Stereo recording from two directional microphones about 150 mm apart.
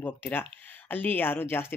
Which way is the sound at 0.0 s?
15° left (ahead or behind).